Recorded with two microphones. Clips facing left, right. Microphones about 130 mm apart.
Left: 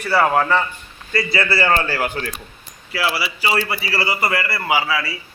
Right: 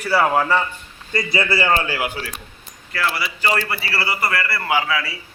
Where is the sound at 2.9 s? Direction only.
5° left (ahead or behind).